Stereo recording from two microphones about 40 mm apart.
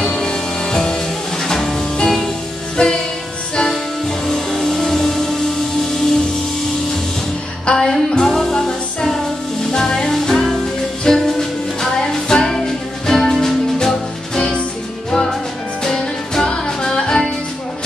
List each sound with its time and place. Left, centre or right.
0.0 s music: centre
2.8 s music: left
4.3 s music: centre
7.6 s music: centre
9.7 s music: centre